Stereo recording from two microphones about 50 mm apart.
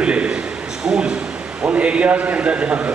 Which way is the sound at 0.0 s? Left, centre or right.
Right.